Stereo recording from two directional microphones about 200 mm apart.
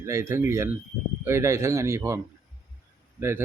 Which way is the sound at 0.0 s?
15° right (ahead or behind).